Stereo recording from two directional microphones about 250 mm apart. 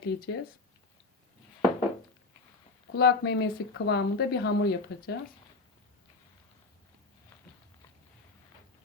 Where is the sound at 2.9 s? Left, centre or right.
Left.